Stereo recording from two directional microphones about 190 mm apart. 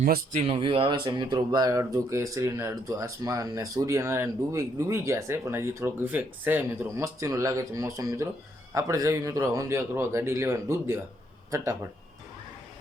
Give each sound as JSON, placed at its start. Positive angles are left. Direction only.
{"t": 0.3, "sound": "speech", "side_deg": -30}